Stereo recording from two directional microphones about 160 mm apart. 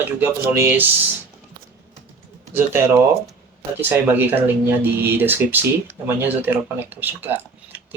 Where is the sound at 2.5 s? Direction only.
15° right (ahead or behind).